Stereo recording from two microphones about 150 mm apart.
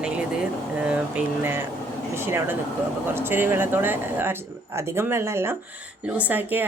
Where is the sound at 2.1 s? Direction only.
15° right (ahead or behind).